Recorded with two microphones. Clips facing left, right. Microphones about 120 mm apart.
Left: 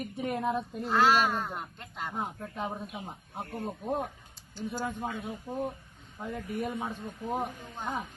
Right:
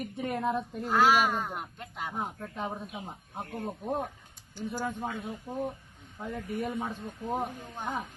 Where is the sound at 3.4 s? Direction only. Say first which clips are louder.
Even; 15° right (ahead or behind).